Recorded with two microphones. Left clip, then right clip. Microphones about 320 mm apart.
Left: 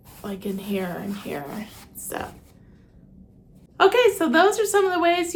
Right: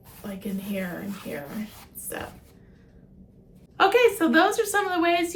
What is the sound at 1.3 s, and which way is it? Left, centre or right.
A woman's voice, centre.